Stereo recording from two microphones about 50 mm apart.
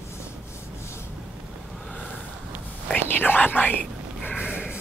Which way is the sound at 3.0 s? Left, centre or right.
Left.